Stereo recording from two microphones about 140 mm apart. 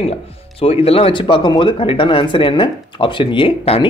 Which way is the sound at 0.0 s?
45° left (ahead or behind).